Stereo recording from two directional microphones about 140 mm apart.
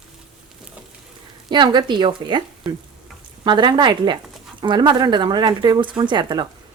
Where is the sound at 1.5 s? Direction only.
30° right (ahead or behind).